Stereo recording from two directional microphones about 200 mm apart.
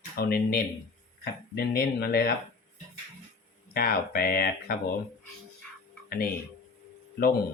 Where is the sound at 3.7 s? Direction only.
50° left (ahead or behind).